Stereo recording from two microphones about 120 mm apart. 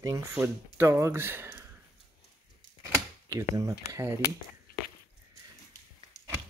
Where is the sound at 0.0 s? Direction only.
25° right (ahead or behind).